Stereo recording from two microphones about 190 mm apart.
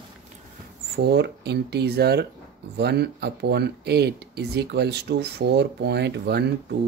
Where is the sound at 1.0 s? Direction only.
60° right (ahead or behind).